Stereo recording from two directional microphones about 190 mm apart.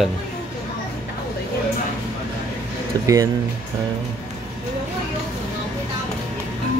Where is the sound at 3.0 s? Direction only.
15° right (ahead or behind).